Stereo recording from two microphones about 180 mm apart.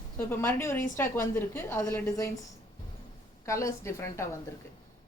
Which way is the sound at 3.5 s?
15° left (ahead or behind).